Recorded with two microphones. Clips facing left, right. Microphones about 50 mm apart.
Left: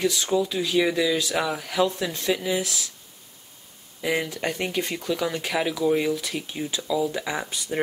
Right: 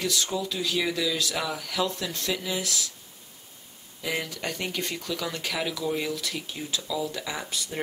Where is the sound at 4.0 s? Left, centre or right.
Centre.